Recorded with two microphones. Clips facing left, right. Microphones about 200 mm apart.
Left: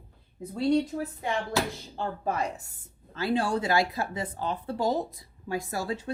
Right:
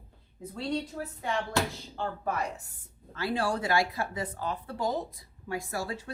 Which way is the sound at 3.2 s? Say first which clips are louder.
Left 3 dB; 25° left (ahead or behind).